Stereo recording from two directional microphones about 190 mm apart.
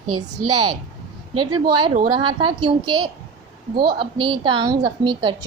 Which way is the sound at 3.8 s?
55° right (ahead or behind).